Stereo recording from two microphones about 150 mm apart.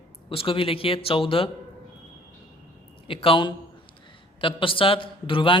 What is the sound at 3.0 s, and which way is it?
A man's voice, 35° left (ahead or behind).